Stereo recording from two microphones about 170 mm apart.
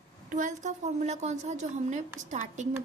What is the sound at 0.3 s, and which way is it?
A woman's voice, 45° right (ahead or behind).